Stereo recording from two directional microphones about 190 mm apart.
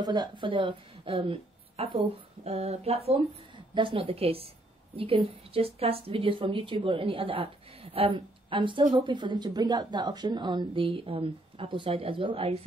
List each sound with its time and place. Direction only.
0.0 s a woman's voice: 20° right (ahead or behind)